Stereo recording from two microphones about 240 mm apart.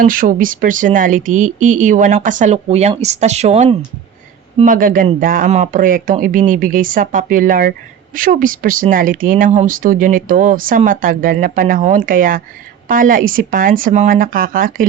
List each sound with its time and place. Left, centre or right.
0.0 s speech: right